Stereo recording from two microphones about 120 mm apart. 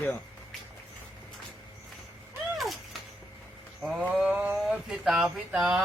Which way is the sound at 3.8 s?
10° right (ahead or behind).